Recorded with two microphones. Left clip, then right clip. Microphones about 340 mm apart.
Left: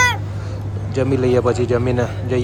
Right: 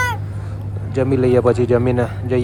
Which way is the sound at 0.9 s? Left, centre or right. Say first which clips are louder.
Right 1 dB; centre.